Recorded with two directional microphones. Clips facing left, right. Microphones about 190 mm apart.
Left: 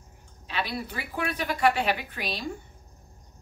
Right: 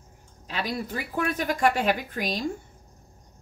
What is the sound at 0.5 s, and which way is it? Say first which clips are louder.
Speech: right 2 dB; 45° right (ahead or behind).